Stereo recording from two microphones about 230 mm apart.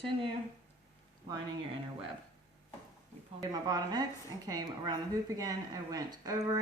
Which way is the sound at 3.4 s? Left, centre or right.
Centre.